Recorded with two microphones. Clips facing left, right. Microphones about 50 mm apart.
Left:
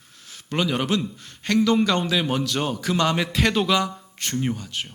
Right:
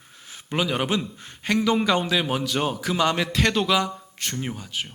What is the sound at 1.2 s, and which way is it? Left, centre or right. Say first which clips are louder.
Speech: right 2 dB; right.